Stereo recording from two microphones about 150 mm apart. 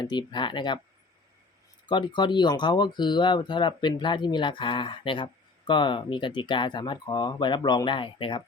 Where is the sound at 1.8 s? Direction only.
30° left (ahead or behind).